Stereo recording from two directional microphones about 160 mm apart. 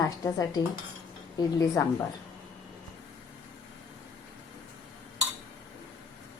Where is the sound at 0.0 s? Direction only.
20° left (ahead or behind).